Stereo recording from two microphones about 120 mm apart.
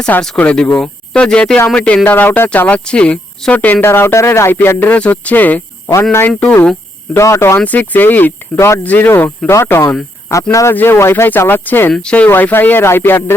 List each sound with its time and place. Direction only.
0.0 s speech: 5° left (ahead or behind)